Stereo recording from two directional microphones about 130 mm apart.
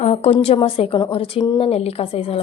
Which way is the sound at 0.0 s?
55° left (ahead or behind).